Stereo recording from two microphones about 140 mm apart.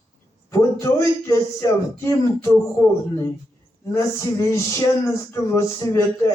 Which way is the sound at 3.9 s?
20° left (ahead or behind).